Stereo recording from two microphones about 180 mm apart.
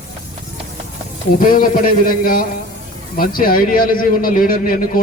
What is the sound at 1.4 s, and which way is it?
A man's voice, 50° left (ahead or behind).